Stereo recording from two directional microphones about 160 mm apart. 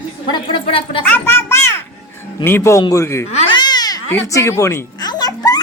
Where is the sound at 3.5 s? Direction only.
25° left (ahead or behind).